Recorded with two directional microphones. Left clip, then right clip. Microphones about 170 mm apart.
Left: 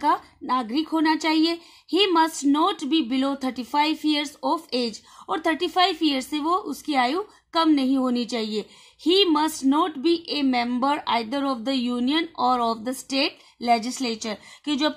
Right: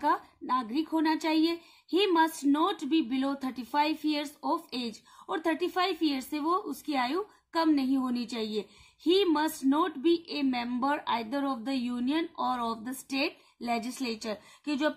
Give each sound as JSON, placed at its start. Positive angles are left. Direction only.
{"t": 0.0, "sound": "a woman's voice", "side_deg": 35}